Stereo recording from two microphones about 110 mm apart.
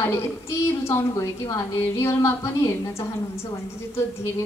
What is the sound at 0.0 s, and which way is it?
A woman's voice, 25° left (ahead or behind).